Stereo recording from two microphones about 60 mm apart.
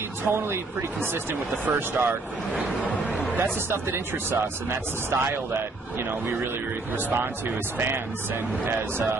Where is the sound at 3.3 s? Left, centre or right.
Right.